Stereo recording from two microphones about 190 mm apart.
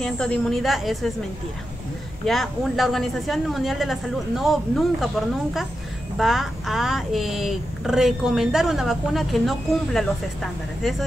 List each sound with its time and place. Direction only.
0.0 s speech: 5° left (ahead or behind)
2.2 s speech: centre (ahead or behind)